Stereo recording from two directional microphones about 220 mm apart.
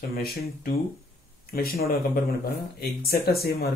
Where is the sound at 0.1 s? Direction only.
45° left (ahead or behind).